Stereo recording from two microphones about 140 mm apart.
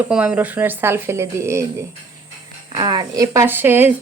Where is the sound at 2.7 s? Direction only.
30° right (ahead or behind); by 3.9 s 15° right (ahead or behind).